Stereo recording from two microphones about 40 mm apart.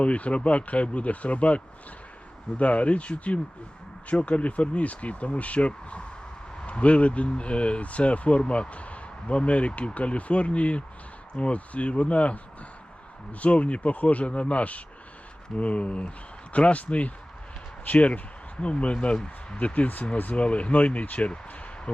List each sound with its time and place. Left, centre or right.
0.0 s speech: left
13.4 s speech: left
19.5 s speech: left
20.3 s speech: left